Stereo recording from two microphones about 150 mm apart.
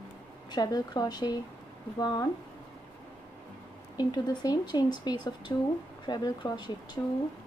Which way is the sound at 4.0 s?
30° left (ahead or behind).